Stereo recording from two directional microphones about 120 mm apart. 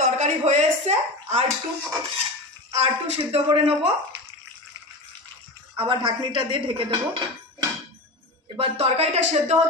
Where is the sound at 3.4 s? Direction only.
50° right (ahead or behind).